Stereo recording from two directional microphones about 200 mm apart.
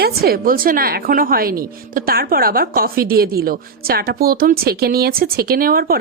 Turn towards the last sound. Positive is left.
turn(degrees=-50)  # may be behind; listen again after turning